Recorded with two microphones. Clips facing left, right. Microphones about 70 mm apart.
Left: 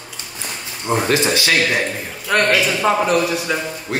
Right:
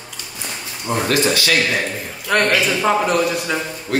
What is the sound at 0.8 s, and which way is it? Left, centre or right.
Speech, left.